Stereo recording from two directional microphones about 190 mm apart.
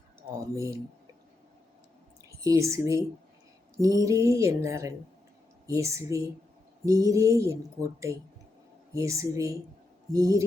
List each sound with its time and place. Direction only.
0.5 s speech: 15° right (ahead or behind)
2.4 s speech: 15° right (ahead or behind)